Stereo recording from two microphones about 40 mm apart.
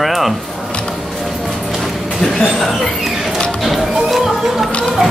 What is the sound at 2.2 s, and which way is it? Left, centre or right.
Speech, centre.